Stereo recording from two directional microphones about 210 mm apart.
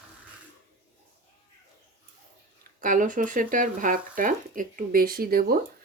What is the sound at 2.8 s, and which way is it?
Speech, 40° right (ahead or behind).